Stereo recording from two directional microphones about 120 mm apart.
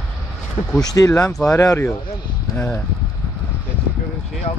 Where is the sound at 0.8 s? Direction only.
30° left (ahead or behind).